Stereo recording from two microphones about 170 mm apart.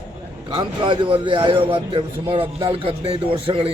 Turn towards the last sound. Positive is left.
turn(degrees=-35)  # may be behind; listen again after turning